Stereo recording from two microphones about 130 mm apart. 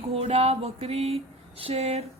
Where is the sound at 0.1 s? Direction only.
50° right (ahead or behind).